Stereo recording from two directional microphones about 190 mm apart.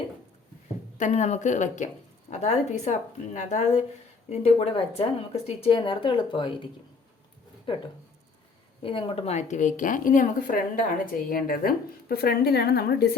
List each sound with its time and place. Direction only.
0.9 s a woman's voice: 40° left (ahead or behind)
8.8 s a woman's voice: 30° left (ahead or behind); by 13.1 s 55° left (ahead or behind)